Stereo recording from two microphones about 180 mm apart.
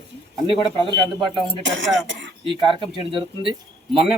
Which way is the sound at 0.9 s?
25° right (ahead or behind).